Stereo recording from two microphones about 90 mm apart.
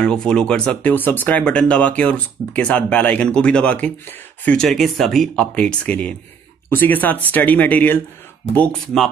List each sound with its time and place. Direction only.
0.0 s speech: 10° left (ahead or behind)
4.5 s speech: 5° left (ahead or behind); by 8.0 s 20° left (ahead or behind)
8.8 s speech: 5° left (ahead or behind)